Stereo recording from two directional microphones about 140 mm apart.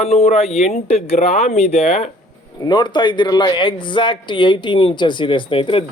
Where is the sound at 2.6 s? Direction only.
30° left (ahead or behind).